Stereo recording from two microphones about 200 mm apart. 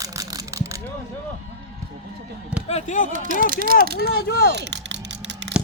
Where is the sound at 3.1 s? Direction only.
40° right (ahead or behind).